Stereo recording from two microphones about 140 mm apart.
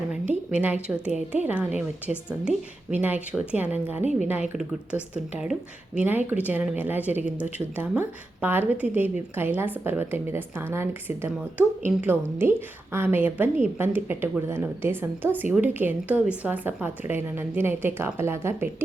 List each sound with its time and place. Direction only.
0.1 s speech: 10° right (ahead or behind)
5.1 s speech: 10° right (ahead or behind)